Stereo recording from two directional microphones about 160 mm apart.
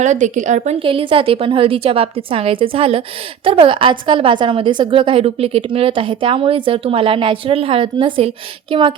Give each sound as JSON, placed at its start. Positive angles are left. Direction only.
{"t": 0.0, "sound": "a woman's voice", "side_deg": -50}
{"t": 0.8, "sound": "a woman's voice", "side_deg": -35}